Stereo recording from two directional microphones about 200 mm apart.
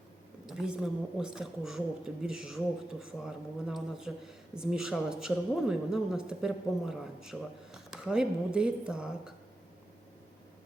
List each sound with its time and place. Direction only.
0.4 s speech: centre (ahead or behind)